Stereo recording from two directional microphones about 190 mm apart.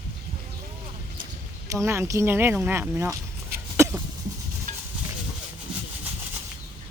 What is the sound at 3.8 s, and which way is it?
Cough, 15° right (ahead or behind).